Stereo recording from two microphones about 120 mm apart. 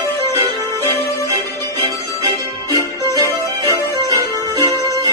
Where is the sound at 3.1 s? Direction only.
25° left (ahead or behind).